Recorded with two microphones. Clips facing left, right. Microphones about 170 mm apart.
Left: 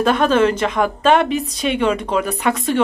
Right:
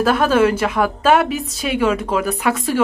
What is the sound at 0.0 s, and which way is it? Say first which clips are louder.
A woman's voice: even; 5° right (ahead or behind).